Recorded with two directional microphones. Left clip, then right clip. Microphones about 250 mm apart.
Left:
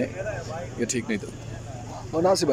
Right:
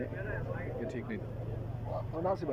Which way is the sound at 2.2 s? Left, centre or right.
Left.